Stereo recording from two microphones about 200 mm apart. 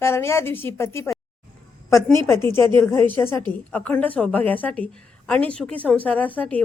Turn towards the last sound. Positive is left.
turn(degrees=5)  # may be behind; listen again after turning